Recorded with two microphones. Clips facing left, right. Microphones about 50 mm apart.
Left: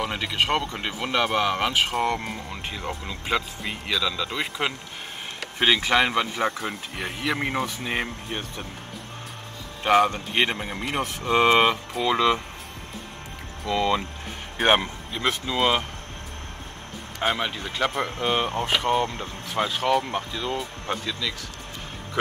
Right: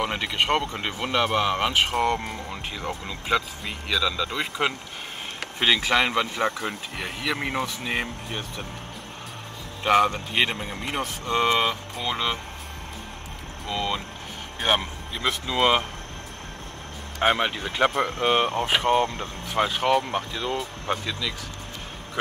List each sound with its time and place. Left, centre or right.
0.0 s speech: centre
5.8 s speech: centre
9.8 s speech: centre; by 11.7 s left
12.1 s speech: left
13.7 s speech: left
14.8 s speech: centre
15.5 s speech: centre
17.2 s speech: centre